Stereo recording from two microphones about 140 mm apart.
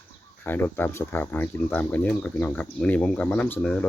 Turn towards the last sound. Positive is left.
turn(degrees=10)  # may be behind; listen again after turning